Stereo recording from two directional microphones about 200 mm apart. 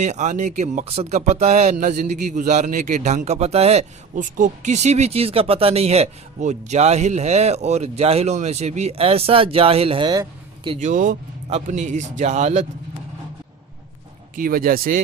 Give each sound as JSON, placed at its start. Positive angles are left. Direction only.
{"t": 0.0, "sound": "speech", "side_deg": -35}
{"t": 10.8, "sound": "speech", "side_deg": -40}
{"t": 14.3, "sound": "speech", "side_deg": -45}